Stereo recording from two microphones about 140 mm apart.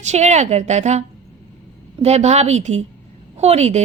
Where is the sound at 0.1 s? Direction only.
55° right (ahead or behind).